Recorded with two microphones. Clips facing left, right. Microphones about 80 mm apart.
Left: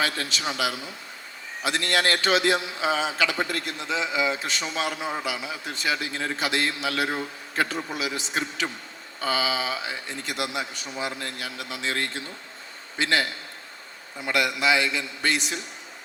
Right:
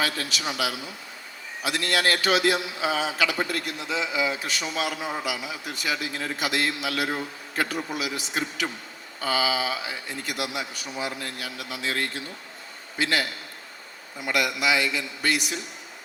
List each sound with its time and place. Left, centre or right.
0.0 s a man's voice: left
14.3 s a man's voice: left